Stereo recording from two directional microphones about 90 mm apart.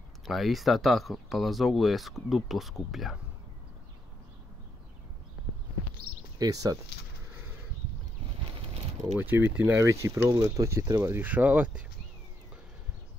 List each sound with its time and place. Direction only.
0.2 s speech: centre (ahead or behind)
6.3 s speech: 40° right (ahead or behind)
9.2 s speech: 20° right (ahead or behind)
9.8 s speech: 35° right (ahead or behind); by 11.8 s 15° right (ahead or behind)